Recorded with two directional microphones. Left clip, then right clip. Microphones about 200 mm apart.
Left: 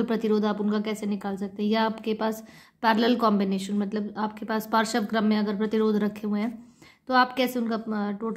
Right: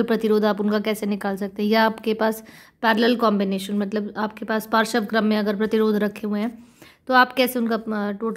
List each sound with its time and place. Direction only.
0.0 s a woman's voice: 25° right (ahead or behind)